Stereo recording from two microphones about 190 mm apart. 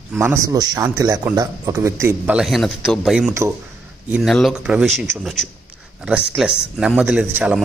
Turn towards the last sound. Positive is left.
turn(degrees=-5)  # may be behind; listen again after turning